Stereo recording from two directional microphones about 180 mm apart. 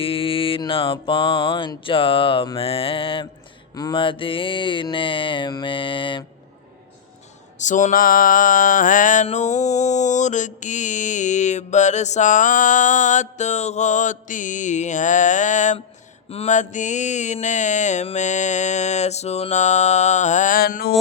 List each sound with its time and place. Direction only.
0.0 s mantra: 30° left (ahead or behind)
7.6 s mantra: 45° left (ahead or behind)